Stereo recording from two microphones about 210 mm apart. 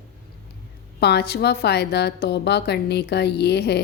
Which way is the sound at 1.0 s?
50° left (ahead or behind).